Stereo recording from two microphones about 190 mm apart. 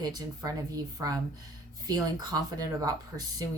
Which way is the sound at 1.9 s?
20° right (ahead or behind).